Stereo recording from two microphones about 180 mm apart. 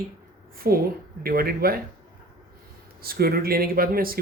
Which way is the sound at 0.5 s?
55° right (ahead or behind).